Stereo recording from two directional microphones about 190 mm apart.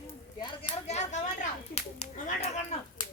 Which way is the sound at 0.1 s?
25° left (ahead or behind).